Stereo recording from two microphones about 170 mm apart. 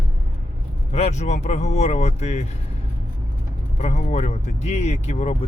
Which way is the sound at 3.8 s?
45° left (ahead or behind).